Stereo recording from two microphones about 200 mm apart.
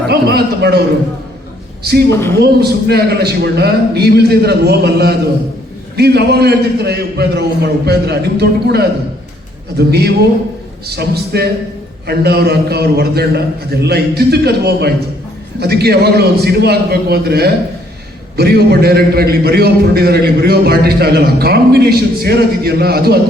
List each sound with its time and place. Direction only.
0.1 s a man's voice: 55° right (ahead or behind)
1.8 s a man's voice: 55° right (ahead or behind)